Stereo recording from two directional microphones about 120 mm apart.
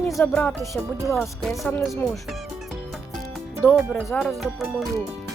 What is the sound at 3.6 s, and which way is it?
Speech, 15° left (ahead or behind).